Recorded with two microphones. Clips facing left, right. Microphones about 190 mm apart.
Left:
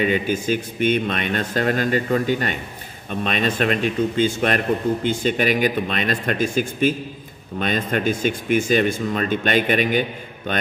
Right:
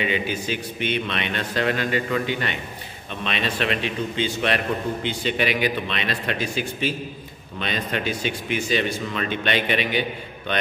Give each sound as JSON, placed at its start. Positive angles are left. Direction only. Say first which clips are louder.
{"t": 0.0, "sound": "speech", "louder": "left 5 dB", "side_deg": 45}